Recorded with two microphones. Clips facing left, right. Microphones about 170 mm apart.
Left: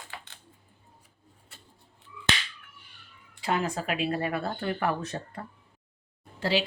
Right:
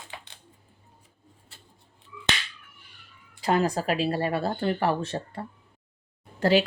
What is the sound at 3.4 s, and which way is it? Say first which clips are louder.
Speech: right 5 dB; 40° right (ahead or behind).